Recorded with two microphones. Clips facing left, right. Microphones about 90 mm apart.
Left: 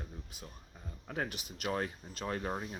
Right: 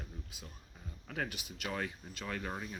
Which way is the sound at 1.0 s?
30° left (ahead or behind).